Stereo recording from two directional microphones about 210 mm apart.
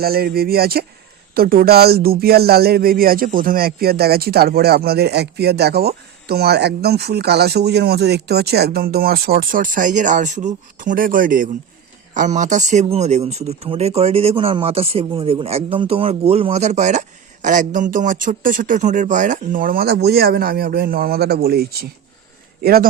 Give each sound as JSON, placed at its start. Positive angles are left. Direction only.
{"t": 0.0, "sound": "speech", "side_deg": -45}